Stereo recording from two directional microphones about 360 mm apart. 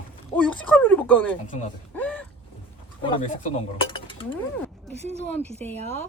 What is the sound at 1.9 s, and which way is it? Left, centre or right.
Vehicle, centre.